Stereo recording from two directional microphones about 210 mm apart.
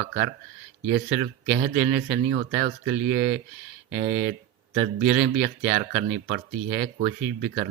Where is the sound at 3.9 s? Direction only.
45° right (ahead or behind).